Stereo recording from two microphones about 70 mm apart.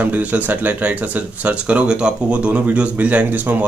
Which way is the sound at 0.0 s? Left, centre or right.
Right.